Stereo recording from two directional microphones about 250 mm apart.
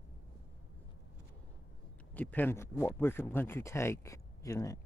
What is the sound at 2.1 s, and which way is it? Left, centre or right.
Speech, centre.